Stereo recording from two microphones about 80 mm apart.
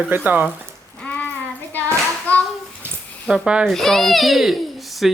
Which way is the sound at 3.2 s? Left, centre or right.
Centre.